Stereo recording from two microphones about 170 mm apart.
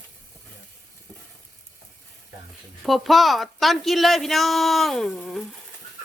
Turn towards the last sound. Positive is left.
turn(degrees=0)  # may be behind; listen again after turning